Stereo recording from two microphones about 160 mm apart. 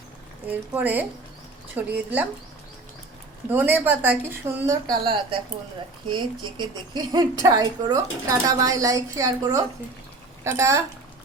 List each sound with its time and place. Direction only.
0.4 s speech: 10° right (ahead or behind)
3.5 s speech: 10° right (ahead or behind)
5.0 s a woman's voice: 35° right (ahead or behind)